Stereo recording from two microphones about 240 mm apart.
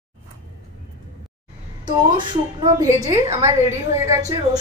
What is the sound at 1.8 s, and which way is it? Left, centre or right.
A woman's voice, centre.